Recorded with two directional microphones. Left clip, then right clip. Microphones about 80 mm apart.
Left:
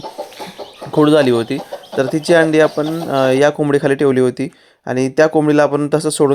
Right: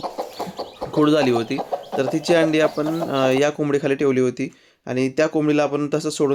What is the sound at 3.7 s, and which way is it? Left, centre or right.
Speech, left.